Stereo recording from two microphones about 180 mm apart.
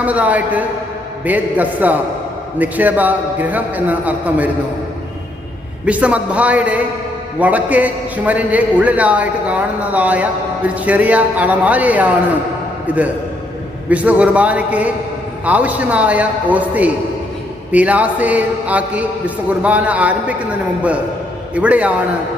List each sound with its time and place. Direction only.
0.0 s a man's voice: 10° right (ahead or behind)
5.8 s a man's voice: 5° right (ahead or behind)